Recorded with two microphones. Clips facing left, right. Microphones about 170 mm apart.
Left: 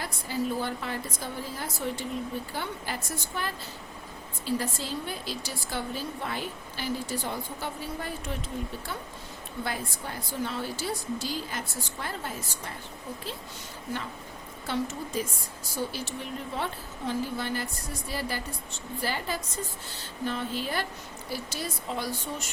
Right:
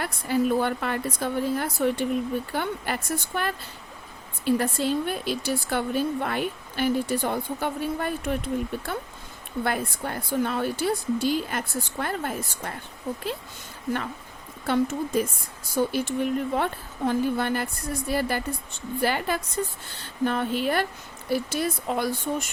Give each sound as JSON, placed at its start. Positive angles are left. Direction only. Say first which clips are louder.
{"t": 0.0, "sound": "a woman's voice", "louder": "right 7 dB", "side_deg": -60}
{"t": 9.6, "sound": "a woman's voice", "louder": "right 7 dB", "side_deg": -60}
{"t": 14.7, "sound": "a woman's voice", "louder": "right 7 dB", "side_deg": -55}